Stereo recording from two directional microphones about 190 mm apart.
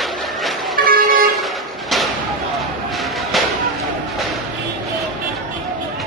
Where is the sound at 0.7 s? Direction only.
50° right (ahead or behind).